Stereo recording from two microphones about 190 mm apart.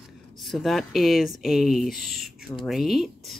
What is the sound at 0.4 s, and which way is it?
Speech, centre (ahead or behind).